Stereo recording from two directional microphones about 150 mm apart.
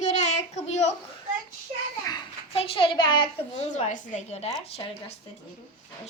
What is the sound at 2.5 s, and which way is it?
A child's voice, 40° left (ahead or behind).